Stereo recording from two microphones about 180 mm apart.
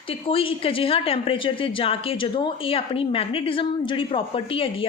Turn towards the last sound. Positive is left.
turn(degrees=30)  # may be behind; listen again after turning